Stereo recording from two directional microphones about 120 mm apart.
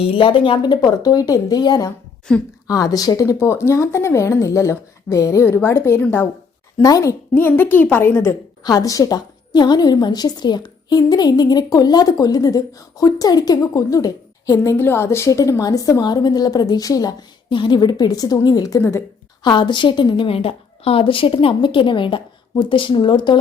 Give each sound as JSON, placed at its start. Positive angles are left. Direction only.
{"t": 0.0, "sound": "a woman's voice", "side_deg": 50}
{"t": 2.3, "sound": "a woman's voice", "side_deg": 5}
{"t": 2.6, "sound": "a woman's voice", "side_deg": 30}
{"t": 6.8, "sound": "speech", "side_deg": 30}
{"t": 7.3, "sound": "a woman's voice", "side_deg": 15}
{"t": 8.6, "sound": "a woman's voice", "side_deg": 30}
{"t": 18.8, "sound": "speech", "side_deg": 20}
{"t": 19.4, "sound": "a woman's voice", "side_deg": 40}